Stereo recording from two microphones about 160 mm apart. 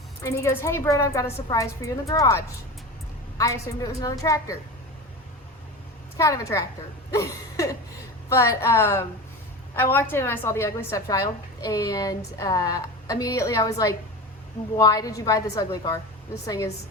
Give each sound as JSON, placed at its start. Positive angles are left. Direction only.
{"t": 0.2, "sound": "a woman's voice", "side_deg": 20}
{"t": 6.1, "sound": "a woman's voice", "side_deg": 20}
{"t": 7.1, "sound": "a sound", "side_deg": 20}
{"t": 8.3, "sound": "a woman's voice", "side_deg": 20}